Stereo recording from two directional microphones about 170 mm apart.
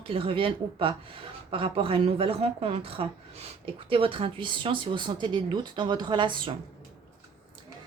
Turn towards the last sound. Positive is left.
turn(degrees=-30)  # may be behind; listen again after turning